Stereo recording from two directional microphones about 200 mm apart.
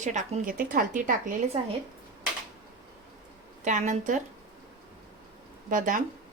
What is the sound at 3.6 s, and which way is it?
Speech, 40° right (ahead or behind).